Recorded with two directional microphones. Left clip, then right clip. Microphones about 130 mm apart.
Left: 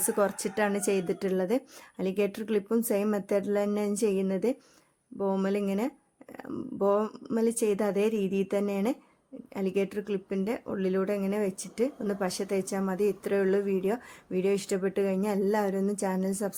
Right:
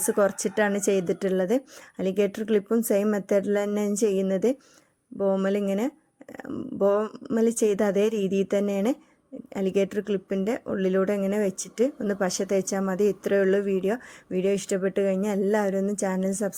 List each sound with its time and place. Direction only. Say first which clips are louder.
0.0 s speech: right 5 dB; 25° right (ahead or behind)